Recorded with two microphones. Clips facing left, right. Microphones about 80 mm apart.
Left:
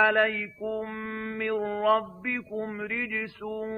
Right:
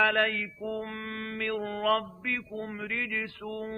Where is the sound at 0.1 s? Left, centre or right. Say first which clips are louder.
Left 3 dB; centre.